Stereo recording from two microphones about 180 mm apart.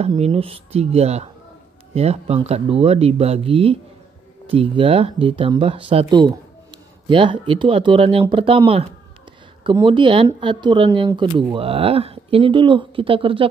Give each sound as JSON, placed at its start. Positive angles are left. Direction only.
{"t": 0.0, "sound": "speech", "side_deg": -35}